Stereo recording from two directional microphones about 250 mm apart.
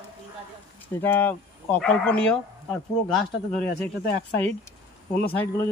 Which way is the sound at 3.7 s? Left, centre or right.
Left.